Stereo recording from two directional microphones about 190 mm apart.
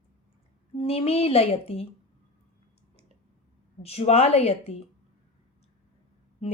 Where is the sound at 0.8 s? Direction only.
30° left (ahead or behind).